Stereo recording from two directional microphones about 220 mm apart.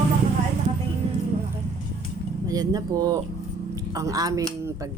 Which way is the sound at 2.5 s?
15° right (ahead or behind).